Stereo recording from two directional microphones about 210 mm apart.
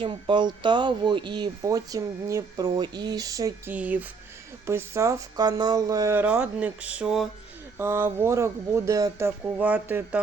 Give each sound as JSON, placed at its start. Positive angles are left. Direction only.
{"t": 0.0, "sound": "speech", "side_deg": -25}